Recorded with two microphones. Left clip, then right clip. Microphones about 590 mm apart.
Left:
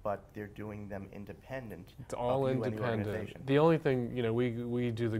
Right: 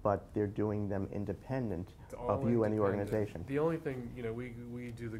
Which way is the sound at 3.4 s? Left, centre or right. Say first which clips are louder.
Left 13 dB; left.